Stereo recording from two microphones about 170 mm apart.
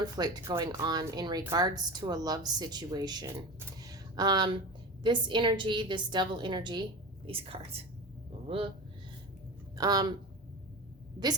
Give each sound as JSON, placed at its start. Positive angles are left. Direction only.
{"t": 0.0, "sound": "speech", "side_deg": -25}
{"t": 3.8, "sound": "a sound", "side_deg": -20}
{"t": 5.0, "sound": "a woman's voice", "side_deg": -30}
{"t": 9.7, "sound": "speech", "side_deg": -20}